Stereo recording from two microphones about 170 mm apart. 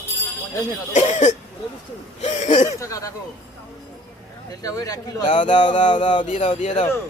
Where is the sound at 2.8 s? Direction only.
20° left (ahead or behind).